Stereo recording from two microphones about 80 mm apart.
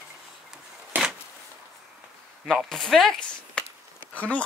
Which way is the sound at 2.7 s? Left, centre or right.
Centre.